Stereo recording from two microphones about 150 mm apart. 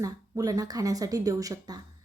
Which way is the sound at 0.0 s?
25° right (ahead or behind).